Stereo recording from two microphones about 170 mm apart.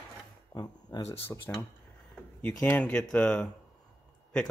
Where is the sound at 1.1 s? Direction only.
15° left (ahead or behind).